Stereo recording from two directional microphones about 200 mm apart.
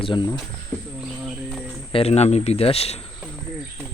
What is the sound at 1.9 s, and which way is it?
Speech, 30° left (ahead or behind).